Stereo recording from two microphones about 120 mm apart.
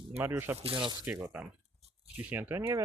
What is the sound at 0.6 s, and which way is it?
Speech, 45° right (ahead or behind).